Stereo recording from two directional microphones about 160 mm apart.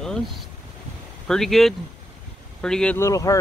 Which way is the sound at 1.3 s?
Centre (ahead or behind).